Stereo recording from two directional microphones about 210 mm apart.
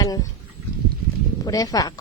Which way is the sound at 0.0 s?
15° left (ahead or behind).